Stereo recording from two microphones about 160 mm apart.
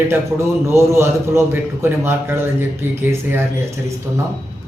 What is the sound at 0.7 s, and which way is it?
A man's voice, 15° right (ahead or behind).